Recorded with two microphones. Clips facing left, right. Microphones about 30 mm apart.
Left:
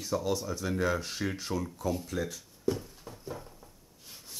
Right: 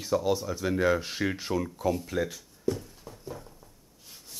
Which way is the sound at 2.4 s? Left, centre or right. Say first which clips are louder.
Right 1 dB; centre.